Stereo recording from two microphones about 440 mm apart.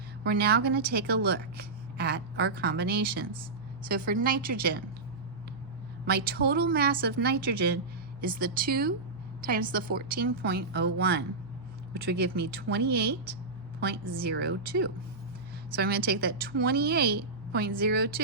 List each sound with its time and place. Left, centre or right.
0.3 s a woman's voice: right
6.1 s a woman's voice: right